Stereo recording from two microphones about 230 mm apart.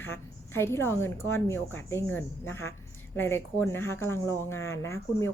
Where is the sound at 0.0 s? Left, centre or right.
Centre.